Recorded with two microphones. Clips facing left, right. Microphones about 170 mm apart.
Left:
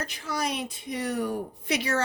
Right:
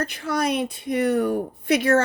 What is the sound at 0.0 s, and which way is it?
Speech, 60° right (ahead or behind).